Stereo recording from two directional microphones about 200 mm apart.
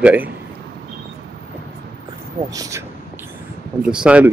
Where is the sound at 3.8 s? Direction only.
5° right (ahead or behind).